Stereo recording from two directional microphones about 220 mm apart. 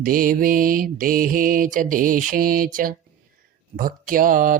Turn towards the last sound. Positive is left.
turn(degrees=-40)  # may be behind; listen again after turning